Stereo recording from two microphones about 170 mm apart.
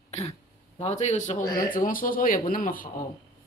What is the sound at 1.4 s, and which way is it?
Speech, 20° left (ahead or behind).